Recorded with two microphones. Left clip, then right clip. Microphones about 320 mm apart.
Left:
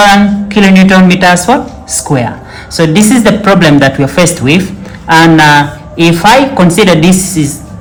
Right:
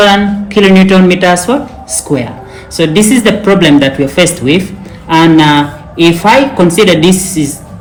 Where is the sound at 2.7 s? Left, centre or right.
Left.